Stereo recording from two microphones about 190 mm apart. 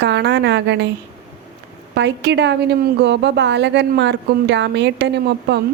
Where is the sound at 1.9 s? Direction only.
65° right (ahead or behind).